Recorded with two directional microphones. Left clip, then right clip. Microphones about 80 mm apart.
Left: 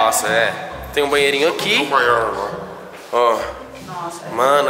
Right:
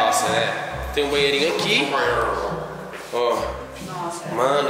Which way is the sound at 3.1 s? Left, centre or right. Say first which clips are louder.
Left 7 dB; left.